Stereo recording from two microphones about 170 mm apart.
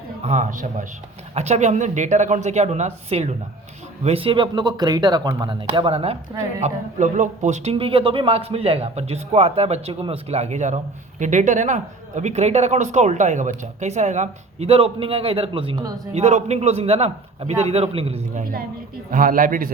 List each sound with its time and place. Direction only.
0.2 s a man's voice: 40° right (ahead or behind); by 16.0 s 25° right (ahead or behind)
16.1 s speech: 40° right (ahead or behind)
19.1 s a man's voice: 55° right (ahead or behind)